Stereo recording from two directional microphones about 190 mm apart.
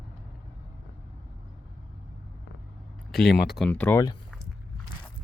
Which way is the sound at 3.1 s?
Centre (ahead or behind).